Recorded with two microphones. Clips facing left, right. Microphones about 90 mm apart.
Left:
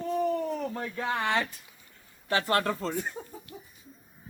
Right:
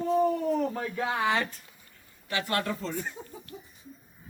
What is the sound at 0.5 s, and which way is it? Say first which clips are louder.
Speech: right 4 dB; 5° right (ahead or behind).